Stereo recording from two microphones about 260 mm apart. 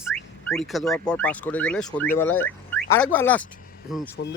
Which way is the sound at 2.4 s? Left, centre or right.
Centre.